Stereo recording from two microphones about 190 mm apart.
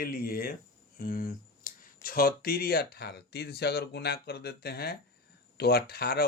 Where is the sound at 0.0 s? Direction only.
50° left (ahead or behind).